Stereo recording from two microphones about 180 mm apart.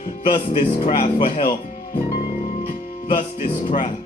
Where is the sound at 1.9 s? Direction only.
45° left (ahead or behind).